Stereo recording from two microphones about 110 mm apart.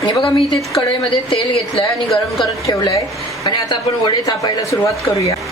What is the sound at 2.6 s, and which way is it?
Speech, 30° left (ahead or behind).